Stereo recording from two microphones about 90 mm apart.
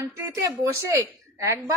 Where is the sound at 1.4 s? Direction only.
30° right (ahead or behind).